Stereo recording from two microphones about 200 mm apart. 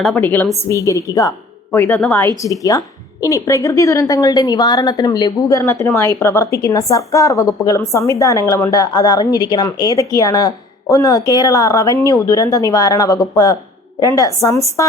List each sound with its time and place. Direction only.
0.0 s a woman's voice: 5° left (ahead or behind)